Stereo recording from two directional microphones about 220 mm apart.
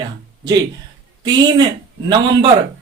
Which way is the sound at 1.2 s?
20° right (ahead or behind).